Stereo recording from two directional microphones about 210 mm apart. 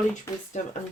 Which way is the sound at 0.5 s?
35° left (ahead or behind).